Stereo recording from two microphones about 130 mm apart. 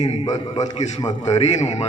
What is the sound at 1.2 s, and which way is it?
Speech, 55° left (ahead or behind).